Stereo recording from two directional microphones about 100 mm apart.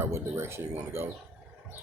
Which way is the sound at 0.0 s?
25° right (ahead or behind).